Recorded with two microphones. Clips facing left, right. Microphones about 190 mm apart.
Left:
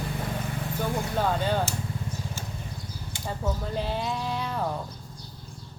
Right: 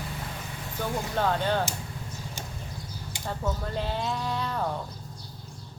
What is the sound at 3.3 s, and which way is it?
Speech, 10° left (ahead or behind).